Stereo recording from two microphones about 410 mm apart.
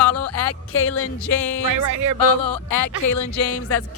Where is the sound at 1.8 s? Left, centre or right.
Right.